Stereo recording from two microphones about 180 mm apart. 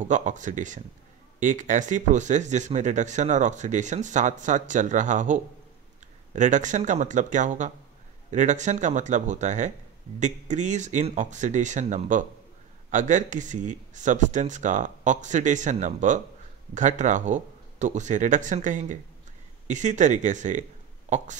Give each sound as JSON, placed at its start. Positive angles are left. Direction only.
{"t": 0.0, "sound": "speech", "side_deg": -45}